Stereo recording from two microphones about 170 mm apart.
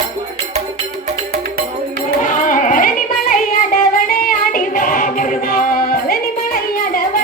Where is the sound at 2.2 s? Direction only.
50° left (ahead or behind).